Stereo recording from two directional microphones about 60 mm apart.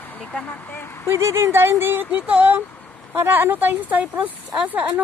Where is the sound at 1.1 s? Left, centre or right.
Right.